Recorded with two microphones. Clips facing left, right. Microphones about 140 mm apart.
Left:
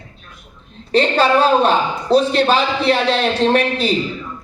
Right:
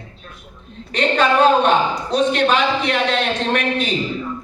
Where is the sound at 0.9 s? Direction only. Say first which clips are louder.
Left 3 dB; 35° left (ahead or behind).